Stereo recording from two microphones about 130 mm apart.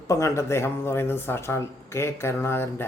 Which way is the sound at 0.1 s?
20° left (ahead or behind).